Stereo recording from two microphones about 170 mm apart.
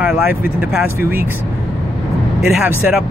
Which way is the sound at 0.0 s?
5° right (ahead or behind).